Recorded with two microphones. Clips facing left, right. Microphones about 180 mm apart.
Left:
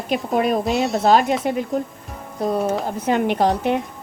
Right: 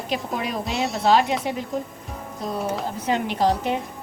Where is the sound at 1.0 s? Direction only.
45° left (ahead or behind).